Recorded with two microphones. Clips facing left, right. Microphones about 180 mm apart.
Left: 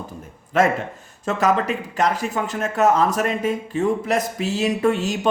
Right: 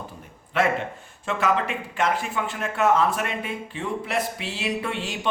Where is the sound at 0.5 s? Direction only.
40° left (ahead or behind).